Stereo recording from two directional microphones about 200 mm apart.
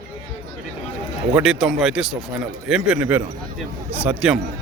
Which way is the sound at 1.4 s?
5° right (ahead or behind).